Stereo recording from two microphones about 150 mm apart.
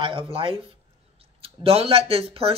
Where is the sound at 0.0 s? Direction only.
35° right (ahead or behind).